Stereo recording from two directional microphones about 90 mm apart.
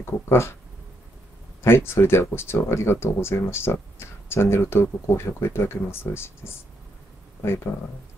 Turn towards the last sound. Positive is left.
turn(degrees=25)  # may be behind; listen again after turning